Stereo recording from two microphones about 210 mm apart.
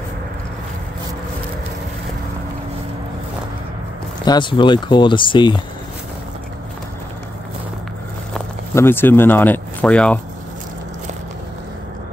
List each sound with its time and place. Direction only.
4.2 s speech: 20° left (ahead or behind)
8.7 s speech: 10° left (ahead or behind)